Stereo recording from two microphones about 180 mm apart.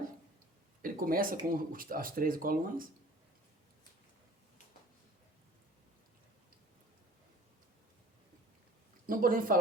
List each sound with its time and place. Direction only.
0.8 s speech: 50° right (ahead or behind)
9.0 s speech: 50° right (ahead or behind)